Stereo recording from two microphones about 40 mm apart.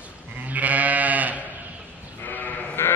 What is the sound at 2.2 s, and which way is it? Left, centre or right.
Sheep, left.